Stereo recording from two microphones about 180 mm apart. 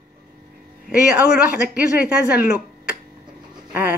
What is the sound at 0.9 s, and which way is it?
A woman's voice, 5° right (ahead or behind).